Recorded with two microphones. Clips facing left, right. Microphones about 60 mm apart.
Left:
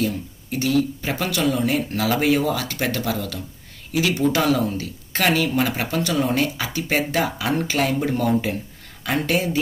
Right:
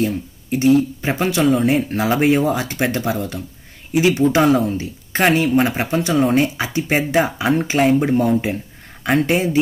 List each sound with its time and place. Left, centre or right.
0.0 s speech: right